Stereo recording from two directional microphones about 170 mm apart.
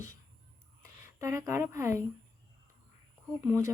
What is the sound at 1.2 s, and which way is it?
Speech, 20° right (ahead or behind).